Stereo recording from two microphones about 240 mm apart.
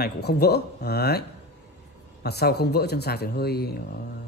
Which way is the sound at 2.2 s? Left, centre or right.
Left.